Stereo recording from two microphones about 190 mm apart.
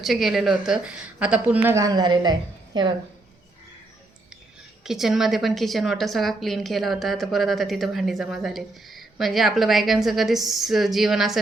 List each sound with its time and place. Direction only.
0.0 s a woman's voice: centre (ahead or behind)
1.6 s speech: 15° right (ahead or behind)
4.8 s a woman's voice: centre (ahead or behind)